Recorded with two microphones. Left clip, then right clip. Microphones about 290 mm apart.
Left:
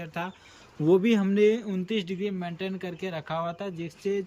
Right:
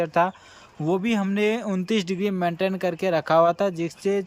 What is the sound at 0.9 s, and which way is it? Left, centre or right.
Speech, centre.